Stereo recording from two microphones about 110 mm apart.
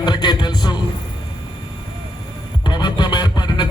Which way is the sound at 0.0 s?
40° left (ahead or behind).